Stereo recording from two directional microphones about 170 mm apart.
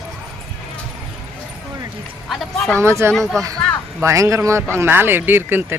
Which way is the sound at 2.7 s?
15° right (ahead or behind).